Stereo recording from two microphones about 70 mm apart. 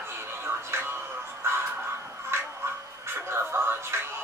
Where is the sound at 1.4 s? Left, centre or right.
Right.